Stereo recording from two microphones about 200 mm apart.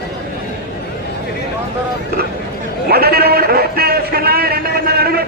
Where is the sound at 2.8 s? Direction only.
50° right (ahead or behind).